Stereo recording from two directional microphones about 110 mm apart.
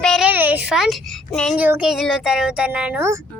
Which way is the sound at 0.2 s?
15° right (ahead or behind).